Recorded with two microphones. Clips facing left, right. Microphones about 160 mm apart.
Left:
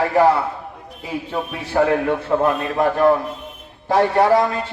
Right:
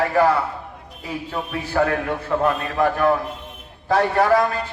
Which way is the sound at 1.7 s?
25° left (ahead or behind).